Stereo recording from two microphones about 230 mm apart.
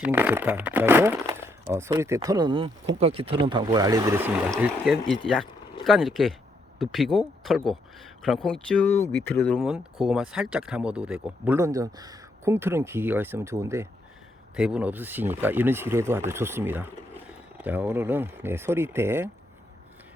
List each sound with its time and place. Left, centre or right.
0.0 s speech: centre